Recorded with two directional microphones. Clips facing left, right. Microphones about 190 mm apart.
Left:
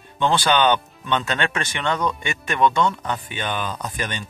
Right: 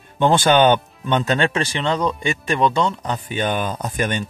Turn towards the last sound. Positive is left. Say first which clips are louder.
# right 6 dB
turn(degrees=-50)  # may be behind; listen again after turning